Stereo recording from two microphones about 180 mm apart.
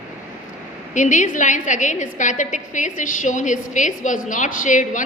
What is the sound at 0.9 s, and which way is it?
A woman's voice, 45° left (ahead or behind).